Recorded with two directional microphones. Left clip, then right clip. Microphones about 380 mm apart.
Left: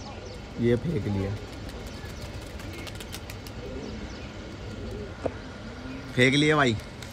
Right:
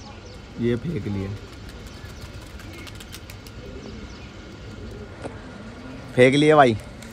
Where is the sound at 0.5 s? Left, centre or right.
Centre.